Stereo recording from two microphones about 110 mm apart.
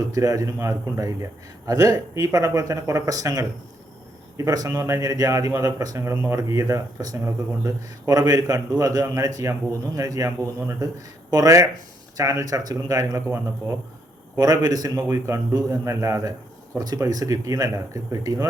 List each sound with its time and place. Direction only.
0.0 s a man's voice: 30° right (ahead or behind)
14.3 s a man's voice: 35° right (ahead or behind)